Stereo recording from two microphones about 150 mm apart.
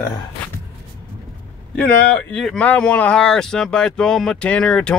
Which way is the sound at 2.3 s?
5° left (ahead or behind).